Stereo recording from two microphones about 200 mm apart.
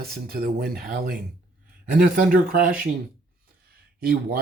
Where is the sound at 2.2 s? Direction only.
45° right (ahead or behind).